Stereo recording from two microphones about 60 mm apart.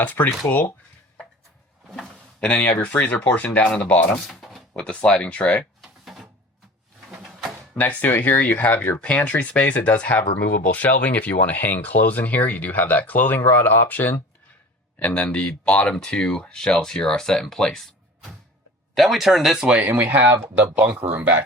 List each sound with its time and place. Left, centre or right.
0.0 s speech: left
2.4 s speech: left
4.3 s a sound: centre
4.7 s speech: centre
5.8 s drawer open or close: centre
7.8 s speech: left
15.1 s speech: left
18.9 s speech: centre
19.6 s speech: centre
19.9 s speech: right